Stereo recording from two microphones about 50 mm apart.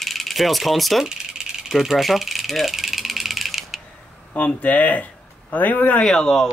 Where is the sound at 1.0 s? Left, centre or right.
Centre.